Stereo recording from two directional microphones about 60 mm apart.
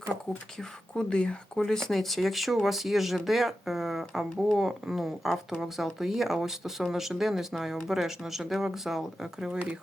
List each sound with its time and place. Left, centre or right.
0.9 s speech: centre
9.5 s speech: centre